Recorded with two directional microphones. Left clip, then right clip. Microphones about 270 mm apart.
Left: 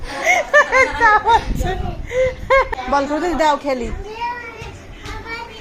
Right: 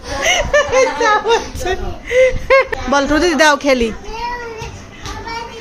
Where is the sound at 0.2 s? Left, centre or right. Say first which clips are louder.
Right 1 dB; right.